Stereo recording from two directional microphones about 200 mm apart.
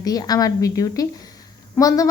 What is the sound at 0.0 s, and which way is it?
A woman's voice, 20° left (ahead or behind).